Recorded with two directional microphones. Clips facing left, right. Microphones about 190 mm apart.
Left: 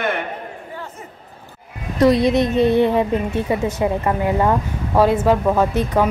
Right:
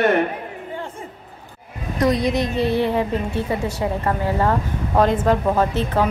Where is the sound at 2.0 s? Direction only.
25° left (ahead or behind).